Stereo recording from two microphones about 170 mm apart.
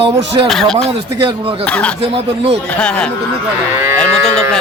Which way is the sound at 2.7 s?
5° left (ahead or behind).